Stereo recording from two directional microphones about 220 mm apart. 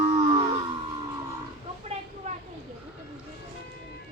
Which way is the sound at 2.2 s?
35° right (ahead or behind).